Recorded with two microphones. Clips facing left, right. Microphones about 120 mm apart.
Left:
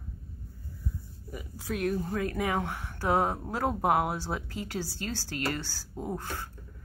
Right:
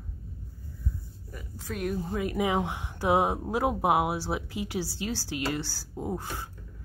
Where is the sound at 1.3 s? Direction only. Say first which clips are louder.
Left 3 dB; 5° left (ahead or behind); by 6.5 s 10° right (ahead or behind).